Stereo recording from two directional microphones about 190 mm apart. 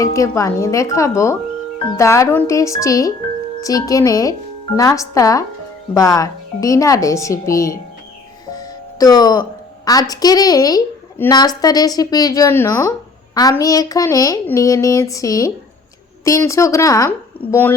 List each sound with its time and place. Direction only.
0.0 s a woman's voice: 15° left (ahead or behind)
8.4 s music: 20° left (ahead or behind)
9.8 s a woman's voice: 20° left (ahead or behind)